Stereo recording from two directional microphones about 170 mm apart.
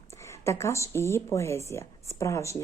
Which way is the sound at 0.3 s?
15° left (ahead or behind).